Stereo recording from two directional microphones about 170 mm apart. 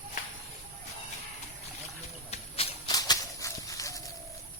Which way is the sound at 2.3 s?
35° left (ahead or behind).